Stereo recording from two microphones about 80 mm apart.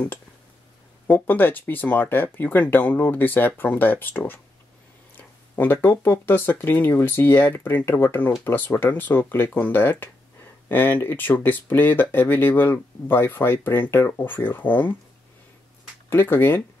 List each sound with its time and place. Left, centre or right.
1.0 s speech: left
16.1 s speech: left